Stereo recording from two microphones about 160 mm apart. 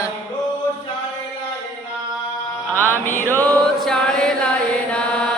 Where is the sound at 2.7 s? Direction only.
10° left (ahead or behind).